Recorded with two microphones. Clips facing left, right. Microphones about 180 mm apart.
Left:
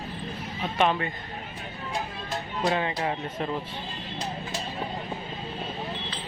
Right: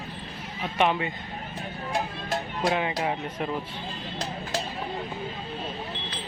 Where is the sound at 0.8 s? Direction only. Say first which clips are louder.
Even; 15° right (ahead or behind).